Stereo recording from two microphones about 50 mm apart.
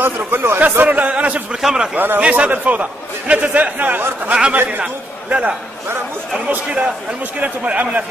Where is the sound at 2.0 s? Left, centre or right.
Right.